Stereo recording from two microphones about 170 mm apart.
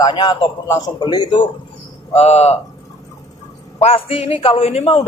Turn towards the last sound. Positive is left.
turn(degrees=35)  # may be behind; listen again after turning